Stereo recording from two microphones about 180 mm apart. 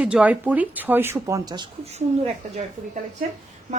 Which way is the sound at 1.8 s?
35° right (ahead or behind).